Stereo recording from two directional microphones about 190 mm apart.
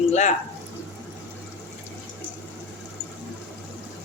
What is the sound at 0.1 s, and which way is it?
Speech, 40° left (ahead or behind).